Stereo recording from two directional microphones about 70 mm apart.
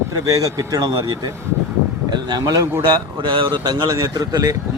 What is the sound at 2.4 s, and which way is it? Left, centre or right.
Speech, right.